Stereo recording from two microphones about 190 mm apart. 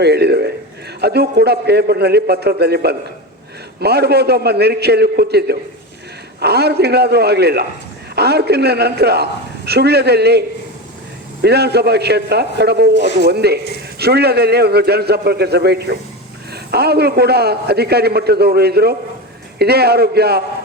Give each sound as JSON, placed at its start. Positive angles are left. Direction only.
{"t": 0.0, "sound": "a man's voice", "side_deg": -60}
{"t": 11.4, "sound": "a man's voice", "side_deg": -60}